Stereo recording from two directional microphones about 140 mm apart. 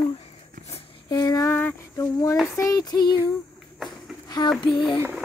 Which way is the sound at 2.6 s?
25° left (ahead or behind).